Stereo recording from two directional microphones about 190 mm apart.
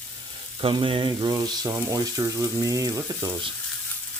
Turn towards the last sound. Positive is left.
turn(degrees=-20)  # may be behind; listen again after turning